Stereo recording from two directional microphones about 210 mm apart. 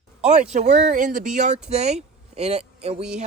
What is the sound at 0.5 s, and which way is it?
Speech, 35° right (ahead or behind).